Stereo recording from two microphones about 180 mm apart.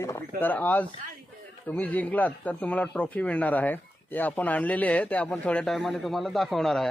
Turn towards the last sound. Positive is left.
turn(degrees=0)  # may be behind; listen again after turning